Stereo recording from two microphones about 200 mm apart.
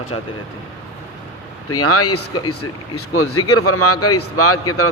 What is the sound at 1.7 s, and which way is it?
A man's voice, 90° left.